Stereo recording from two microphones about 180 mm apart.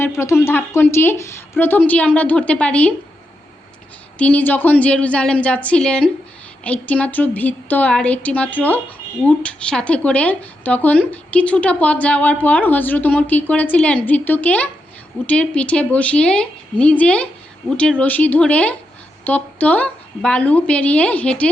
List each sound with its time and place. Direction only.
0.0 s speech: 15° left (ahead or behind)
4.2 s speech: 10° left (ahead or behind)